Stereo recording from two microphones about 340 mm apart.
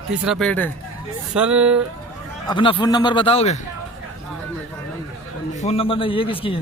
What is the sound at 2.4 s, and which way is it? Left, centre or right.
Speech, centre.